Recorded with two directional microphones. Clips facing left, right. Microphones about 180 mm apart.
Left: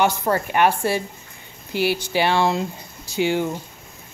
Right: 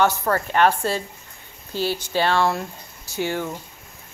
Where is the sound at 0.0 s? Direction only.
15° left (ahead or behind).